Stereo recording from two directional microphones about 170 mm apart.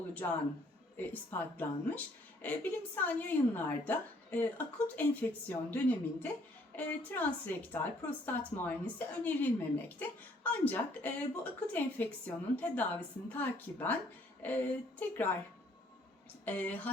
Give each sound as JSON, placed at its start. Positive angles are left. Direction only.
{"t": 0.2, "sound": "a woman's voice", "side_deg": 15}
{"t": 16.5, "sound": "a woman's voice", "side_deg": 10}